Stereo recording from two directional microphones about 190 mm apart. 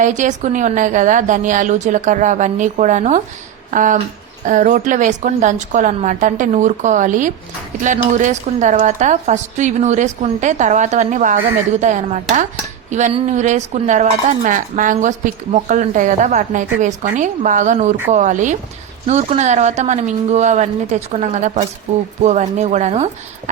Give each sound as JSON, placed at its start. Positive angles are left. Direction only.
{"t": 0.0, "sound": "speech", "side_deg": -40}
{"t": 3.7, "sound": "a sound", "side_deg": -40}
{"t": 4.4, "sound": "speech", "side_deg": -40}